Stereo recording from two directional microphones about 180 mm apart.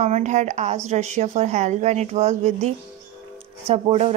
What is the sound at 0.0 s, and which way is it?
Speech, 40° right (ahead or behind).